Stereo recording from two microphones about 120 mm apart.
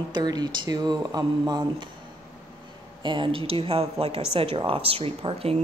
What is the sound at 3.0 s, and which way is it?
Speech, 45° right (ahead or behind).